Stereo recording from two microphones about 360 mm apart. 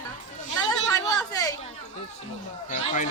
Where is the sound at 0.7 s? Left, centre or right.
Centre.